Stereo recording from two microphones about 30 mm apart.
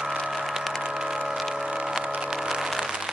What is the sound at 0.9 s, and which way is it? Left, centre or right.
Music, centre.